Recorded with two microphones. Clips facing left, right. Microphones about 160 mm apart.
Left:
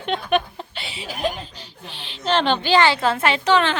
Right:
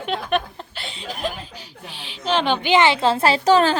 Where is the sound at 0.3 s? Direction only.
Centre (ahead or behind).